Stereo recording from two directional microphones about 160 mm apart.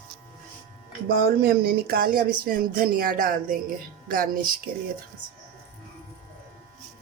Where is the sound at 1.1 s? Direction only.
70° right (ahead or behind).